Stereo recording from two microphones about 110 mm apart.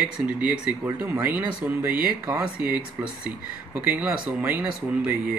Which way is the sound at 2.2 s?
35° right (ahead or behind).